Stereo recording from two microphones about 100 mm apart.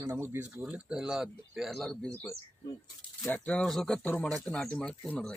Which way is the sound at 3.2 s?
15° left (ahead or behind).